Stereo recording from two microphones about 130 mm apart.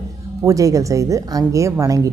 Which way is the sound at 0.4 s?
25° right (ahead or behind).